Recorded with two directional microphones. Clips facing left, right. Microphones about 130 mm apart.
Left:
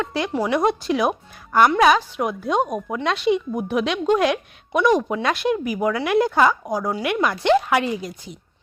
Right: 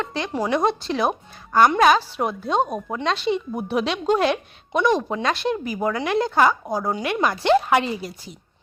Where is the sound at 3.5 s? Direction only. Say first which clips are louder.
Left 1 dB; 35° right (ahead or behind).